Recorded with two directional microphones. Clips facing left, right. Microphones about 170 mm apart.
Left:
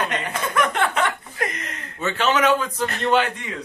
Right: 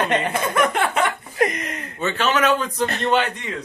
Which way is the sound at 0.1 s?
30° right (ahead or behind).